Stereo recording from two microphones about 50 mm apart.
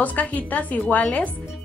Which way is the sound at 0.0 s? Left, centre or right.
Left.